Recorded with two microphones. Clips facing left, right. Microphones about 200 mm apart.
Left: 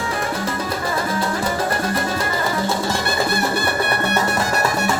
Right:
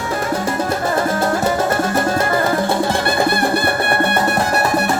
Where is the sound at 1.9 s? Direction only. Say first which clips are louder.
Right 6 dB; 50° right (ahead or behind).